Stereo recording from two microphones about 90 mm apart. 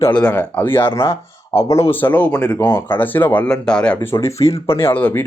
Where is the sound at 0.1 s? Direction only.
15° left (ahead or behind).